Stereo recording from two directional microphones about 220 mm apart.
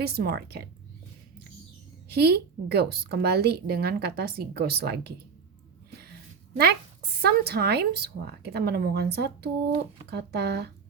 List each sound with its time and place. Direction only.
0.0 s a woman's voice: 45° right (ahead or behind)
2.0 s a woman's voice: 45° right (ahead or behind)
7.2 s a woman's voice: 45° right (ahead or behind)